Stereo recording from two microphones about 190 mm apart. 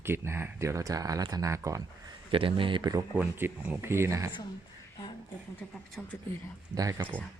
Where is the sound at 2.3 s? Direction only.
30° right (ahead or behind).